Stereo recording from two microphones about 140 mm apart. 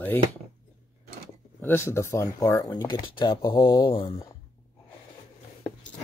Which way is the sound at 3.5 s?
35° left (ahead or behind).